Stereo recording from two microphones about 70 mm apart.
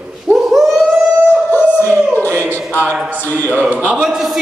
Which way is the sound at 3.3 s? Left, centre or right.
Left.